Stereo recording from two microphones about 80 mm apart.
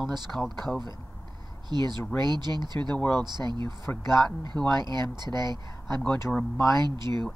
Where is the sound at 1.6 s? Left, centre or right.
Right.